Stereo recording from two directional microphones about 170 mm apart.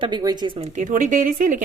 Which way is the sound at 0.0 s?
25° right (ahead or behind).